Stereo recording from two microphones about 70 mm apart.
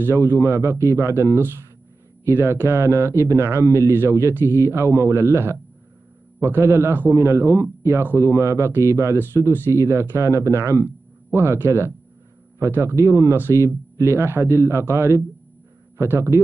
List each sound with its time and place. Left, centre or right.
0.0 s a man's voice: right